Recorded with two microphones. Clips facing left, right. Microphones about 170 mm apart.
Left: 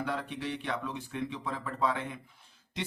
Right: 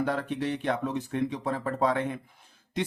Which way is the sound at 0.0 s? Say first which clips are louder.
Right 6 dB; 45° right (ahead or behind).